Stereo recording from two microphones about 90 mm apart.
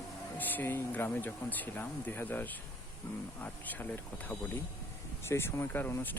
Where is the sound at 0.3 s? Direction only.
20° left (ahead or behind).